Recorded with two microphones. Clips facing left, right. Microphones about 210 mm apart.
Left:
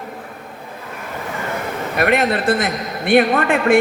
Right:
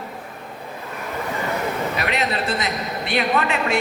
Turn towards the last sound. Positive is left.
turn(degrees=50)  # may be behind; listen again after turning